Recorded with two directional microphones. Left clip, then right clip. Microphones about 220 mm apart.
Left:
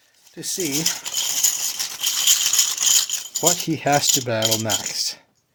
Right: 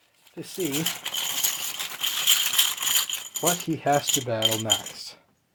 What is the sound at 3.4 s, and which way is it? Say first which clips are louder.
Speech: left 4 dB; 55° left (ahead or behind).